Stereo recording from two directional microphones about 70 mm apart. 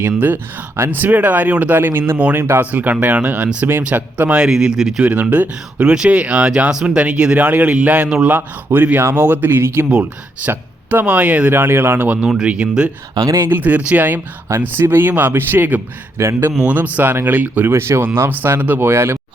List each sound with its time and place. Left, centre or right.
0.0 s speech: right
4.4 s speech: centre
5.0 s speech: right
8.4 s speech: right
11.5 s speech: right; by 12.9 s centre
13.1 s speech: right
13.4 s speech: right
16.1 s speech: right
16.6 s speech: right
17.7 s speech: right